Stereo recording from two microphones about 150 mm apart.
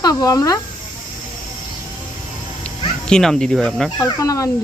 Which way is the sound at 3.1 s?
5° left (ahead or behind).